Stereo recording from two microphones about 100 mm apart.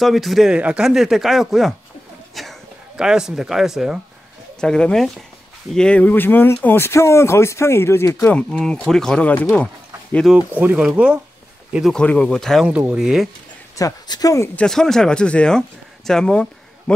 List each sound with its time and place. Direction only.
0.0 s speech: centre (ahead or behind)
2.4 s a sound: centre (ahead or behind)
3.0 s speech: 5° right (ahead or behind)
4.6 s speech: 10° left (ahead or behind); by 8.2 s 25° left (ahead or behind)
8.2 s speech: 10° left (ahead or behind)
10.3 s speech: 15° right (ahead or behind)
11.9 s speech: 10° left (ahead or behind)
12.6 s speech: 15° right (ahead or behind)
13.7 s speech: 40° left (ahead or behind)
14.5 s speech: 10° left (ahead or behind)